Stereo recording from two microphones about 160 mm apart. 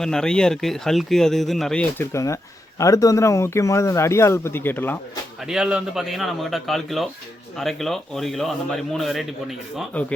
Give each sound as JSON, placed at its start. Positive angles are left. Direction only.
{"t": 0.0, "sound": "speech", "side_deg": 5}
{"t": 2.1, "sound": "speech", "side_deg": 20}
{"t": 5.5, "sound": "speech", "side_deg": -5}